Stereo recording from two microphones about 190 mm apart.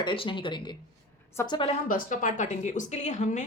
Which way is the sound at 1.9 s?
45° left (ahead or behind).